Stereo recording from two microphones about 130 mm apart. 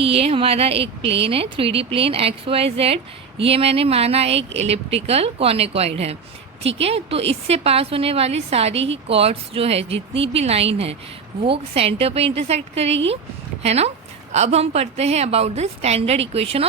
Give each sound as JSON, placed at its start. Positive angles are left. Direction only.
{"t": 0.0, "sound": "a woman's voice", "side_deg": -50}